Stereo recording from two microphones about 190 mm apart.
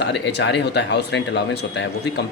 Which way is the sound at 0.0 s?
65° left (ahead or behind).